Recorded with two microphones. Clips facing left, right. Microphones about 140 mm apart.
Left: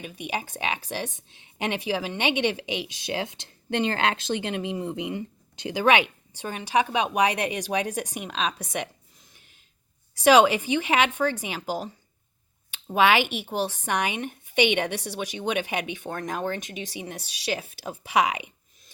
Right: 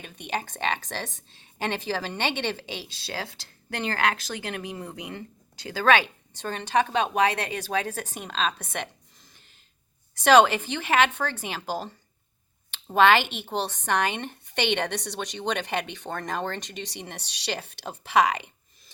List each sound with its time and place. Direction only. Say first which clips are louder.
0.0 s a woman's voice: even; 10° left (ahead or behind)
10.2 s a woman's voice: even; 10° left (ahead or behind)